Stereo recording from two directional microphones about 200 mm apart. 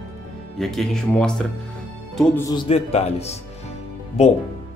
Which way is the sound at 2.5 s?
25° left (ahead or behind).